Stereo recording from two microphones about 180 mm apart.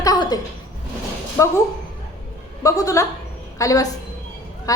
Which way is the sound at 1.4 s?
15° left (ahead or behind).